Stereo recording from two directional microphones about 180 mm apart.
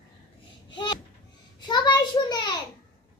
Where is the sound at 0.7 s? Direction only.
25° left (ahead or behind).